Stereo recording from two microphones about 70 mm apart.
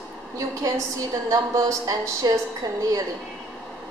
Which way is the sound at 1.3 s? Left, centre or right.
Right.